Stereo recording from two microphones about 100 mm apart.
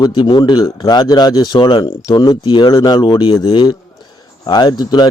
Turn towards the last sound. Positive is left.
turn(degrees=45)  # may be behind; listen again after turning